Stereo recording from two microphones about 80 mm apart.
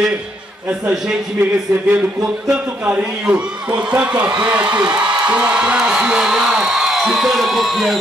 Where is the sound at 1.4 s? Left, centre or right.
Right.